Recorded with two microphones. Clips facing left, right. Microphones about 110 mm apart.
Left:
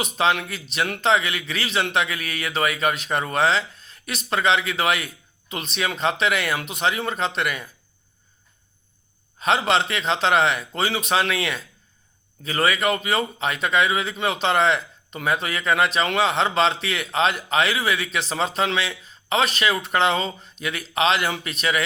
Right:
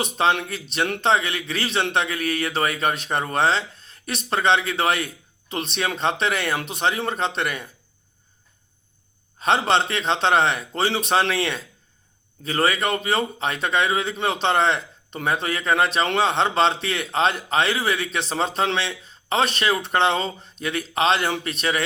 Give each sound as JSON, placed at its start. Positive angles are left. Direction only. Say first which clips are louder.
{"t": 0.0, "sound": "speech", "louder": "right 1 dB", "side_deg": -35}
{"t": 9.4, "sound": "speech", "louder": "right 1 dB", "side_deg": -35}